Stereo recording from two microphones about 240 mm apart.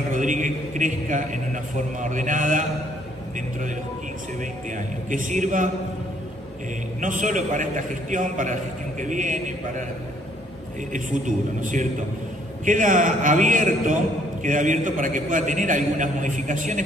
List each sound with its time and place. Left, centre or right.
0.1 s a man's voice: right
4.4 s a man's voice: right
7.0 s a man's voice: right
10.9 s a man's voice: right